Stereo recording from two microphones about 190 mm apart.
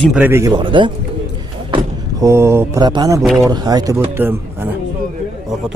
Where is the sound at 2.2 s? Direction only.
15° right (ahead or behind).